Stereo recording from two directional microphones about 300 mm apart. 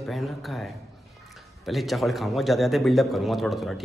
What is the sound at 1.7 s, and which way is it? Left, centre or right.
A man's voice, centre.